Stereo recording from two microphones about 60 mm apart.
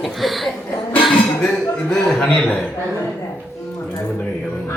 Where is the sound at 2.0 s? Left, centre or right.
Centre.